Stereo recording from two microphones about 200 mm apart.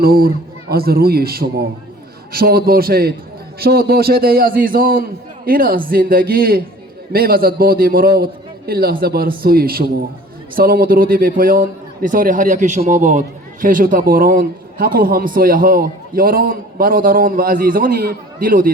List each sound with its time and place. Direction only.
0.0 s a man's voice: 50° right (ahead or behind)